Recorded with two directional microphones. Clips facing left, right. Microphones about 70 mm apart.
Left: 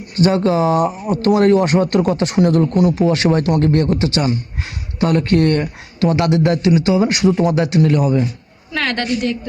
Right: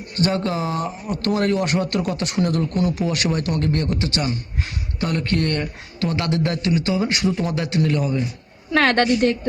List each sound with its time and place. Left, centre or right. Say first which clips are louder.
0.2 s speech: left 7 dB; left
8.7 s a woman's voice: right 3 dB; right